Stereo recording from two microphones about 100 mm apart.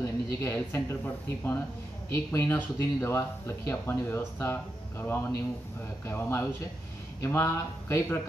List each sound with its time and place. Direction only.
0.0 s speech: 25° left (ahead or behind)